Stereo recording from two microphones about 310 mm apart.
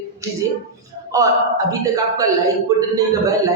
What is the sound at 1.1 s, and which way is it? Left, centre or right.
A man's voice, centre.